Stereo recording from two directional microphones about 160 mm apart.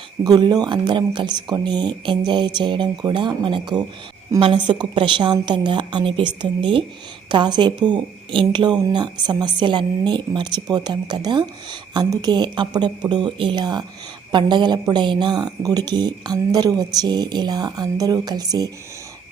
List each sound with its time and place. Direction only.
0.3 s speech: 25° right (ahead or behind)